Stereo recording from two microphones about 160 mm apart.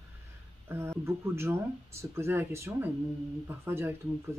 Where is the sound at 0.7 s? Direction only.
15° right (ahead or behind).